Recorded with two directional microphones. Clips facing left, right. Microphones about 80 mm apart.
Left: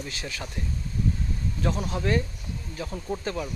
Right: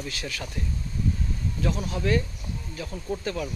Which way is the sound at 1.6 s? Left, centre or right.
Left.